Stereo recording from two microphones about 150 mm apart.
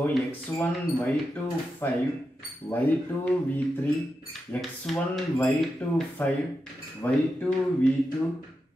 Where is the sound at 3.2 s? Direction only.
10° left (ahead or behind).